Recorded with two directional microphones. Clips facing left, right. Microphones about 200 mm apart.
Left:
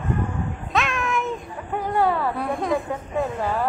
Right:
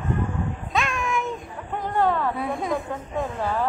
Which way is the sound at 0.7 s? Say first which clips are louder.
Left 2 dB; centre (ahead or behind).